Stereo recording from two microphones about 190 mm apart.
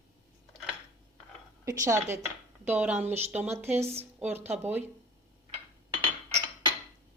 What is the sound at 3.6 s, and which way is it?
Speech, 15° right (ahead or behind).